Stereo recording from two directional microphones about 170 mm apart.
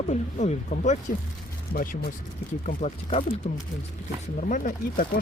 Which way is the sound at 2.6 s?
45° left (ahead or behind).